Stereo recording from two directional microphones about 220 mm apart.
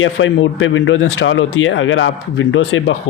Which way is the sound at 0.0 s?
60° left (ahead or behind).